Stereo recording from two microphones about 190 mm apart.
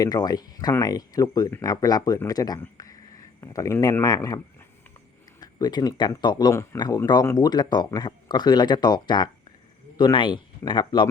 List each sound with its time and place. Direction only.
0.0 s speech: 20° left (ahead or behind)
5.4 s speech: 20° left (ahead or behind)